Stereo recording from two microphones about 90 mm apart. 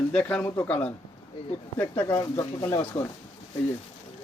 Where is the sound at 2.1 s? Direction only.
40° left (ahead or behind).